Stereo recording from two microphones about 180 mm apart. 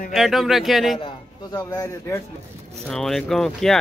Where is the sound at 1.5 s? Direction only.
20° left (ahead or behind).